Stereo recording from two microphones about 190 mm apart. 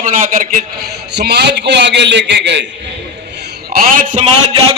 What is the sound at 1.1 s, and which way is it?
A man's voice, 60° right (ahead or behind).